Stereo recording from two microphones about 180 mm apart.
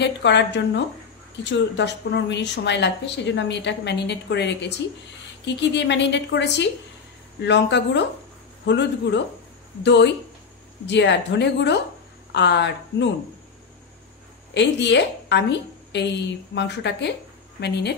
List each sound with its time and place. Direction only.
0.0 s speech: 75° left (ahead or behind)
14.5 s speech: 75° left (ahead or behind)